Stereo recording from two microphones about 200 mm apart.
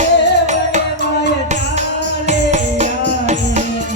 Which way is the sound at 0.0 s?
35° right (ahead or behind).